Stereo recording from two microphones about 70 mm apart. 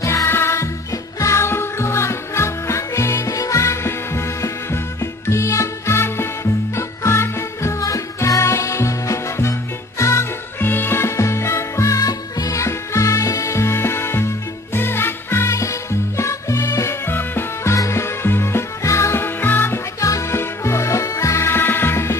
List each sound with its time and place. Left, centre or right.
0.0 s music: left
0.3 s music: left
10.6 s music: left
17.1 s music: left
20.0 s music: left